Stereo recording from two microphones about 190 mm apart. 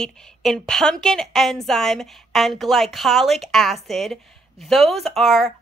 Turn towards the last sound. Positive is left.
turn(degrees=0)  # may be behind; listen again after turning